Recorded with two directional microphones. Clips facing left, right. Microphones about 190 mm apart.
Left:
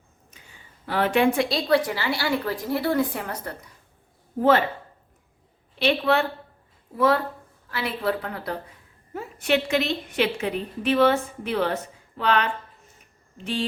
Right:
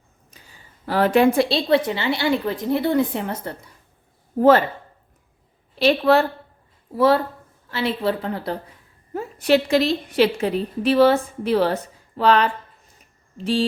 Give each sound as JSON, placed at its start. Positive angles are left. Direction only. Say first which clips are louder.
{"t": 0.9, "sound": "a woman's voice", "louder": "right 4 dB", "side_deg": -40}
{"t": 1.5, "sound": "a woman's voice", "louder": "right 3 dB", "side_deg": -25}
{"t": 4.4, "sound": "a woman's voice", "louder": "right 5 dB", "side_deg": -40}
{"t": 5.8, "sound": "a woman's voice", "louder": "right 5 dB", "side_deg": -40}